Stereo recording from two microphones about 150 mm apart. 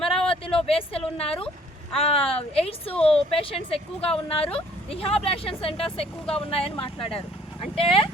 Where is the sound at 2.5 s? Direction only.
40° left (ahead or behind).